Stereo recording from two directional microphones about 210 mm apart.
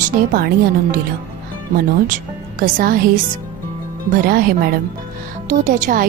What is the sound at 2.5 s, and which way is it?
Speech, 40° right (ahead or behind).